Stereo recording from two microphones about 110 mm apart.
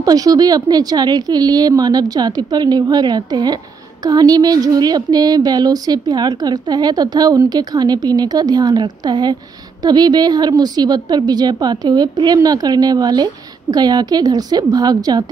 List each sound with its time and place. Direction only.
0.0 s speech: 35° right (ahead or behind)